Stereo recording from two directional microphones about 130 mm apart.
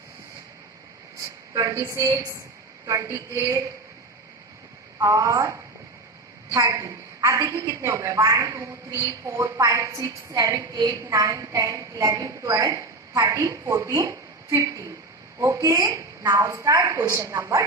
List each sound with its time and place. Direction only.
1.5 s a woman's voice: 25° right (ahead or behind)
4.9 s a woman's voice: 25° right (ahead or behind)